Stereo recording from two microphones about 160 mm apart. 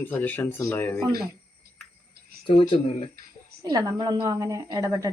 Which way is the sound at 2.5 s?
35° left (ahead or behind).